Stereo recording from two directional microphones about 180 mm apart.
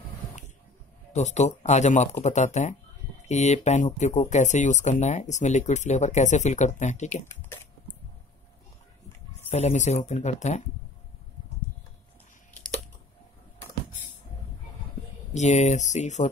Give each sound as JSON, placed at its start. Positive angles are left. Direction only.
{"t": 1.1, "sound": "speech", "side_deg": 40}
{"t": 9.5, "sound": "speech", "side_deg": 35}
{"t": 15.3, "sound": "speech", "side_deg": 40}